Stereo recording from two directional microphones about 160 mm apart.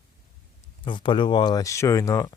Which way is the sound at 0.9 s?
30° left (ahead or behind).